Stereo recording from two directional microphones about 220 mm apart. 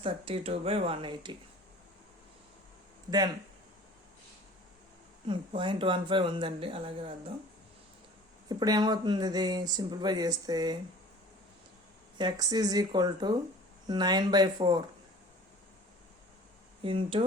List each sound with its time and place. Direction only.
0.0 s speech: 25° right (ahead or behind)
5.3 s speech: 20° right (ahead or behind)
8.4 s speech: 20° right (ahead or behind)
12.1 s speech: 20° right (ahead or behind)
16.8 s speech: 25° right (ahead or behind)